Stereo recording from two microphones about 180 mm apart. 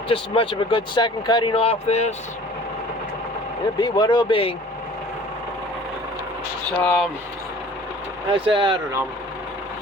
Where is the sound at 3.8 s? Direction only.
25° left (ahead or behind).